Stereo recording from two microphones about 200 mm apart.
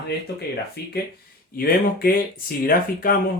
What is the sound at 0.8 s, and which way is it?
Speech, 55° left (ahead or behind).